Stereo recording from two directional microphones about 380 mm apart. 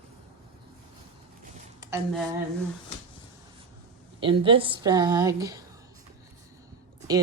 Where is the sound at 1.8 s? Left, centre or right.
Centre.